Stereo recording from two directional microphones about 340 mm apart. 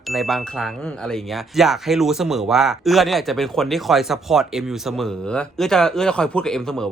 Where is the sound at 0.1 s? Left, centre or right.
Centre.